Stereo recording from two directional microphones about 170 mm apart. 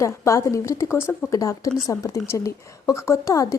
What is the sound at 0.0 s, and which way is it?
Speech, 20° left (ahead or behind).